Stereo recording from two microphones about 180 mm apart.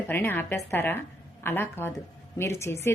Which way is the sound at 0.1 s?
10° left (ahead or behind).